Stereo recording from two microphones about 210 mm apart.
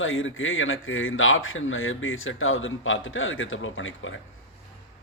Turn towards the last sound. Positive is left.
turn(degrees=65)  # may be behind; listen again after turning